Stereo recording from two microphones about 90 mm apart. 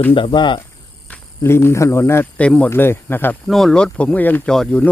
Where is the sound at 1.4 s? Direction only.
30° left (ahead or behind).